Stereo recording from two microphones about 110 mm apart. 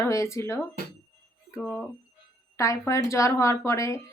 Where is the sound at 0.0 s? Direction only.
25° left (ahead or behind).